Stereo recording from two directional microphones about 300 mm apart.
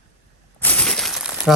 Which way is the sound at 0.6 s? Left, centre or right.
Centre.